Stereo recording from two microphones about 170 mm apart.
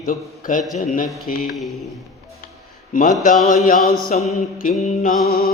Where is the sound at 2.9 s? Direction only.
55° left (ahead or behind).